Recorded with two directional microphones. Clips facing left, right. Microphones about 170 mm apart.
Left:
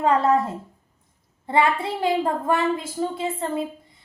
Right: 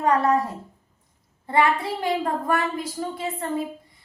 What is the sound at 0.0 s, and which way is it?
Child singing, 25° left (ahead or behind).